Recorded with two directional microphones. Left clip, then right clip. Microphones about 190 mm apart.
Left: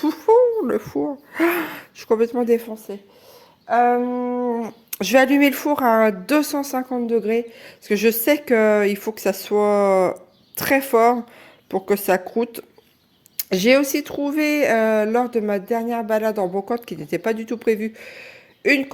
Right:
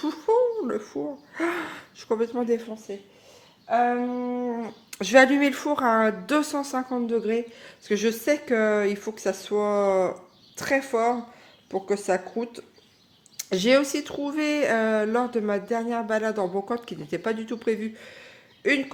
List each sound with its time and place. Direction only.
0.0 s a woman's voice: 40° left (ahead or behind)